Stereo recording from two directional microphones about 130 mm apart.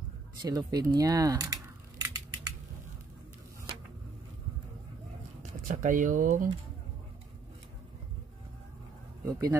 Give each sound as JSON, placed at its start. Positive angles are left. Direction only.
{"t": 0.4, "sound": "a sound", "side_deg": -30}
{"t": 5.4, "sound": "speech", "side_deg": -80}
{"t": 9.2, "sound": "speech", "side_deg": -25}